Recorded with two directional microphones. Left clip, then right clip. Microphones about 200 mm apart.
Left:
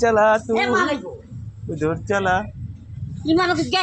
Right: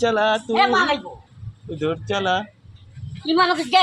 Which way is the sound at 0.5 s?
10° right (ahead or behind).